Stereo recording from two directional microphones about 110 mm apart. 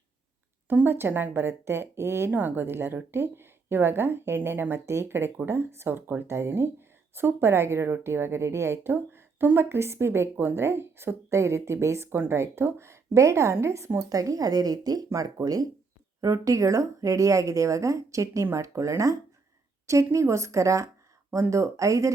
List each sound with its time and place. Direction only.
0.7 s speech: 20° right (ahead or behind)